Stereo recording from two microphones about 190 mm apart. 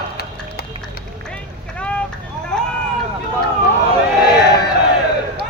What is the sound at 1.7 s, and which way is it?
Vehicle, 5° left (ahead or behind).